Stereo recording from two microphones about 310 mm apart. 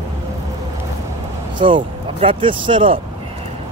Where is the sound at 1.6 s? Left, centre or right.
Centre.